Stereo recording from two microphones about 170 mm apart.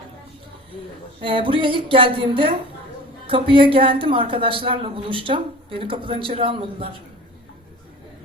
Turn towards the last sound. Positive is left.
turn(degrees=-35)  # may be behind; listen again after turning